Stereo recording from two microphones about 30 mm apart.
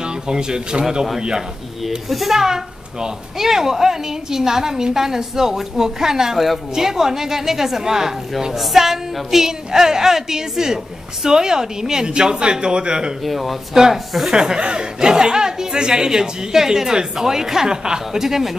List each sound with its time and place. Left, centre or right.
0.0 s speech: right
2.0 s speech: centre
2.3 s a woman's voice: centre
13.2 s speech: centre
14.2 s speech: right
18.2 s a woman's voice: centre